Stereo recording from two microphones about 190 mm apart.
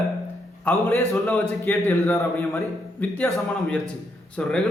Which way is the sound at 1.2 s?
10° left (ahead or behind).